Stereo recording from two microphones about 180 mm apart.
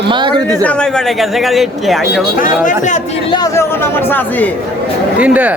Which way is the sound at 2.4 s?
45° left (ahead or behind).